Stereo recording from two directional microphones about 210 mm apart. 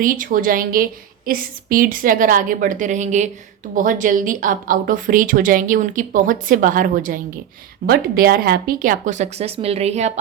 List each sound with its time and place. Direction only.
0.0 s a woman's voice: 40° right (ahead or behind)